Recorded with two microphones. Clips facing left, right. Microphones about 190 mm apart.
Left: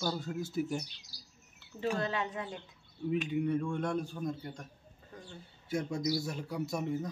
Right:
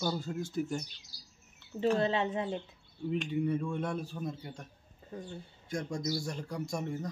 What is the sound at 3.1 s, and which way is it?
A man's voice, 5° left (ahead or behind).